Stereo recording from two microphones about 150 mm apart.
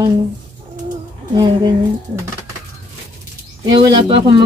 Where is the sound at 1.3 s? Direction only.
25° right (ahead or behind).